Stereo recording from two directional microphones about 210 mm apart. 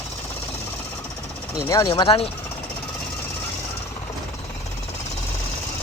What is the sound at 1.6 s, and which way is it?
Speech, 20° left (ahead or behind).